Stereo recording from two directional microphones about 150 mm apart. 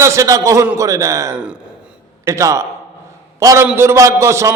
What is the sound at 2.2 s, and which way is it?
A man's voice, 20° right (ahead or behind).